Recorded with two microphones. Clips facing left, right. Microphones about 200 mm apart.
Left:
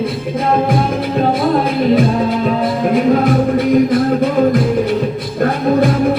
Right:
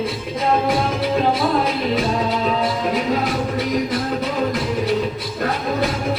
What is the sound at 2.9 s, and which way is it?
Music, 55° left (ahead or behind).